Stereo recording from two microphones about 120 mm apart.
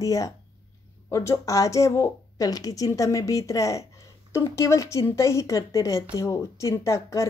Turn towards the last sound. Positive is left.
turn(degrees=25)  # may be behind; listen again after turning